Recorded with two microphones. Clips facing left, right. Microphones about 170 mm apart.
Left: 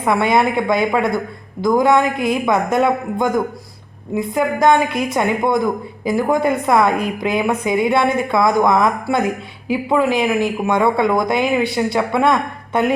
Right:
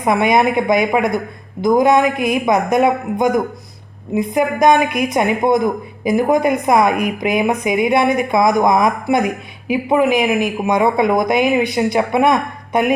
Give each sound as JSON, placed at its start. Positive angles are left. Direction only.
{"t": 0.0, "sound": "a woman's voice", "side_deg": -15}